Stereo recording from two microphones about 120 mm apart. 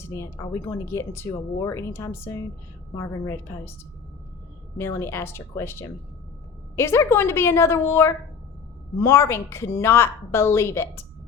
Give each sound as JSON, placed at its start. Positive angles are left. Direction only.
{"t": 0.1, "sound": "speech", "side_deg": 25}
{"t": 4.8, "sound": "speech", "side_deg": 25}